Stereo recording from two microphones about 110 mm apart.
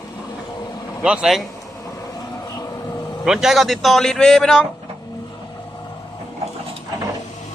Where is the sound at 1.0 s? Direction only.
5° right (ahead or behind).